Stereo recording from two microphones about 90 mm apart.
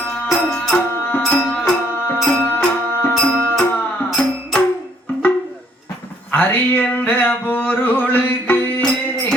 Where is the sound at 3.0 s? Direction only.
20° left (ahead or behind).